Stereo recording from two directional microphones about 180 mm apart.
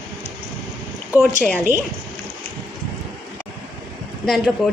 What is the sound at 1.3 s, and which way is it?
Speech, 45° right (ahead or behind).